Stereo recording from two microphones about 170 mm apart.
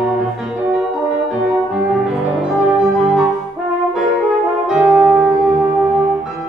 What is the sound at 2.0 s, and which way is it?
Music, centre (ahead or behind).